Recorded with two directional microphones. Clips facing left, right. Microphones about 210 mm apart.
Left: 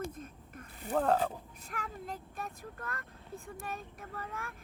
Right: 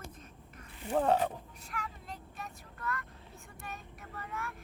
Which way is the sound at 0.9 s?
5° right (ahead or behind).